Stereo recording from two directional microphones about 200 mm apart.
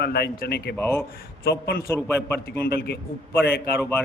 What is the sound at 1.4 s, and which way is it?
Speech, 55° left (ahead or behind).